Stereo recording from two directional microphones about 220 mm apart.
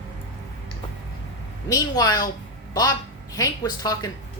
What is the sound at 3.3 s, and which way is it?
Speech, 15° left (ahead or behind).